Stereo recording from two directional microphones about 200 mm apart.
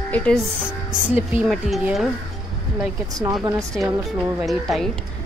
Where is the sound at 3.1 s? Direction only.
15° right (ahead or behind).